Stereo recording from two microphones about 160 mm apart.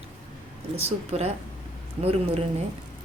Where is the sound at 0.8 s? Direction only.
40° right (ahead or behind).